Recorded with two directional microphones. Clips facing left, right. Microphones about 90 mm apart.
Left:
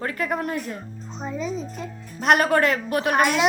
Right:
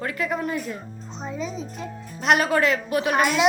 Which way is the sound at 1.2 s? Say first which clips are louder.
Left 2 dB; centre (ahead or behind).